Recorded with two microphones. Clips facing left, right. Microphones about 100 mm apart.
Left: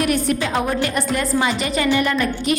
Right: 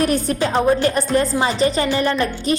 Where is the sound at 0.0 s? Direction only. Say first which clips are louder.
Right 1 dB; 35° right (ahead or behind).